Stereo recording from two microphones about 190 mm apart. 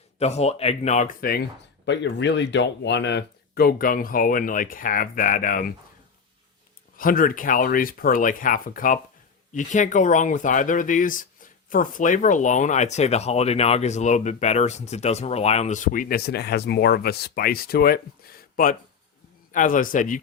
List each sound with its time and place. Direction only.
0.2 s speech: 35° left (ahead or behind)
6.9 s speech: 45° left (ahead or behind)